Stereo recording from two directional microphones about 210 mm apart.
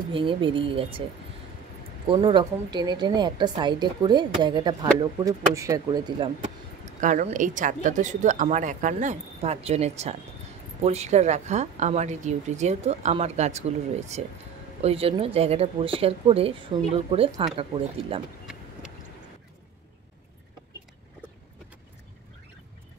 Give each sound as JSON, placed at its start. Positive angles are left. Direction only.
{"t": 0.1, "sound": "a woman's voice", "side_deg": -25}
{"t": 2.0, "sound": "a woman's voice", "side_deg": -20}
{"t": 7.0, "sound": "a woman's voice", "side_deg": -35}